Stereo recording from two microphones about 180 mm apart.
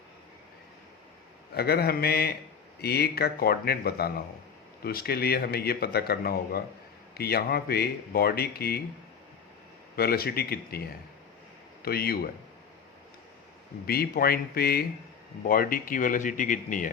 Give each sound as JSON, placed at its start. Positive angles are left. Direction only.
{"t": 1.5, "sound": "a man's voice", "side_deg": 60}
{"t": 9.9, "sound": "a man's voice", "side_deg": 55}
{"t": 13.8, "sound": "a man's voice", "side_deg": 55}